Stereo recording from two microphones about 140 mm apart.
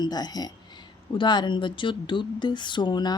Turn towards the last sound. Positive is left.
turn(degrees=30)  # may be behind; listen again after turning